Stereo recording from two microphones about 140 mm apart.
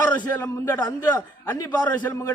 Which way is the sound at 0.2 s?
15° left (ahead or behind).